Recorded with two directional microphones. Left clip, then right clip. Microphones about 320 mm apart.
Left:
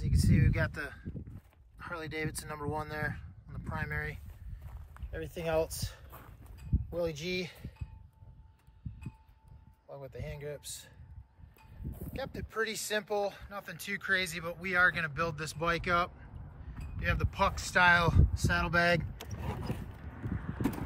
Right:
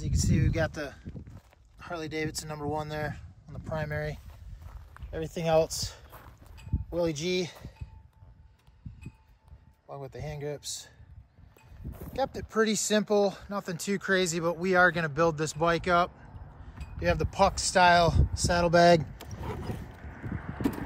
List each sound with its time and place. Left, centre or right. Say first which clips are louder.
0.0 s speech: right 2 dB; centre
5.1 s speech: right 7 dB; right
10.0 s speech: right 5 dB; centre
11.9 s speech: right 10 dB; centre
20.1 s a sound: right 3 dB; right